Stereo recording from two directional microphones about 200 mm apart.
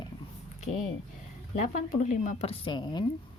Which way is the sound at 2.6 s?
20° left (ahead or behind).